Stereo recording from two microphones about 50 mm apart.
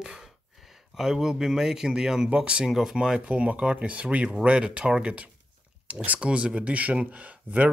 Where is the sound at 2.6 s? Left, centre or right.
Centre.